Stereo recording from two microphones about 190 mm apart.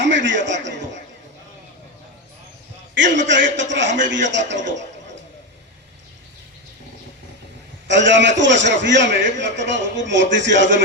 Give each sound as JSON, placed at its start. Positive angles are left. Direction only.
{"t": 0.0, "sound": "a man's voice", "side_deg": -70}
{"t": 2.9, "sound": "a man's voice", "side_deg": -70}
{"t": 7.9, "sound": "a man's voice", "side_deg": -70}